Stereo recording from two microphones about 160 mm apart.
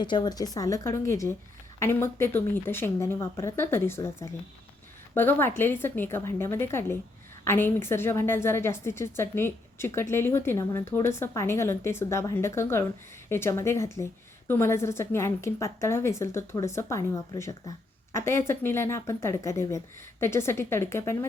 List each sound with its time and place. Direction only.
0.0 s a woman's voice: 30° left (ahead or behind)